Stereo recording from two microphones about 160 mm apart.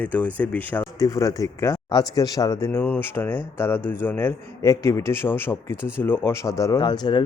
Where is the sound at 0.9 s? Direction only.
20° left (ahead or behind).